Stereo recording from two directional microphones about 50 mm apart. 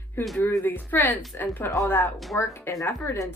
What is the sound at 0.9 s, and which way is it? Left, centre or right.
Speech, left.